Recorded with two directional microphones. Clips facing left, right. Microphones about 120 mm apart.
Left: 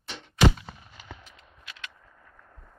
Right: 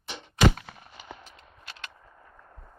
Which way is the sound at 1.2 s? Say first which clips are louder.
Right 2 dB; 30° right (ahead or behind).